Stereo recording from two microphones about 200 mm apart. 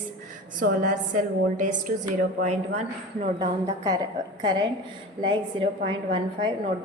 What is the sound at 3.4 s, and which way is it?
Speech, 20° right (ahead or behind).